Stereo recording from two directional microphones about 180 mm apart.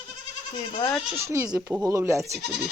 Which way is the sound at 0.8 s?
5° left (ahead or behind).